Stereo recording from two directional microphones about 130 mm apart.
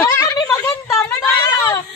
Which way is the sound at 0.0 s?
25° left (ahead or behind).